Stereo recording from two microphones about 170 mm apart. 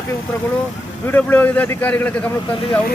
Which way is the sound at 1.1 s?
10° left (ahead or behind).